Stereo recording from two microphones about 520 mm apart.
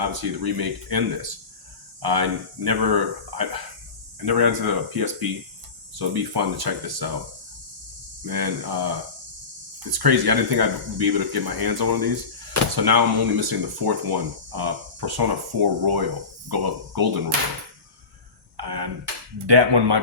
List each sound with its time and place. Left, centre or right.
0.0 s speech: right
8.2 s speech: right
18.5 s a sound: right
19.5 s speech: right